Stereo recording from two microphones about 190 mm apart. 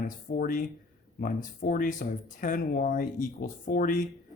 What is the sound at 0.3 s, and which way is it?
Speech, 45° left (ahead or behind).